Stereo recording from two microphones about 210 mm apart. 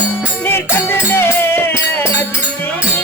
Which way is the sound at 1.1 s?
10° left (ahead or behind).